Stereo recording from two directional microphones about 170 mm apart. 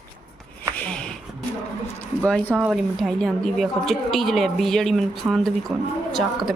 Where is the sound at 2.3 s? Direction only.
5° left (ahead or behind).